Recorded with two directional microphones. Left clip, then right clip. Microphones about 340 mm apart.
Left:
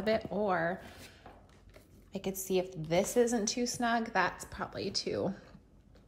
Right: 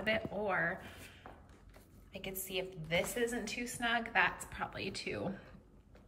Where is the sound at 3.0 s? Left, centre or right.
Centre.